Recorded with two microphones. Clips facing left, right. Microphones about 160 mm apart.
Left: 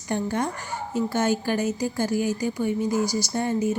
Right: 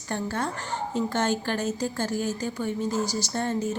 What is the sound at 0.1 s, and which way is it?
Speech, 15° left (ahead or behind).